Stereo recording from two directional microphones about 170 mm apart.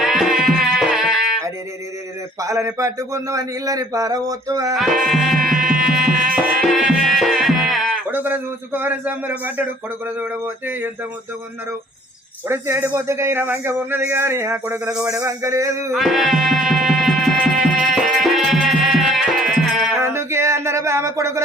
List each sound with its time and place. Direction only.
0.0 s music: centre (ahead or behind)
2.4 s a man's voice: 20° right (ahead or behind)
4.7 s music: centre (ahead or behind)
10.2 s a man's voice: 10° right (ahead or behind)
12.5 s a man's voice: 15° right (ahead or behind)
16.0 s music: centre (ahead or behind)
20.0 s speech: 15° right (ahead or behind)